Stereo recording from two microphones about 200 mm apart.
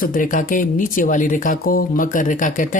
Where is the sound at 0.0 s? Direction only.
40° left (ahead or behind).